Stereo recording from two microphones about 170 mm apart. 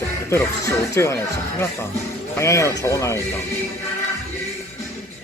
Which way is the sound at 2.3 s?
15° left (ahead or behind).